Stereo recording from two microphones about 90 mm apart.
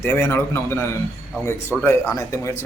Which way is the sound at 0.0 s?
25° left (ahead or behind).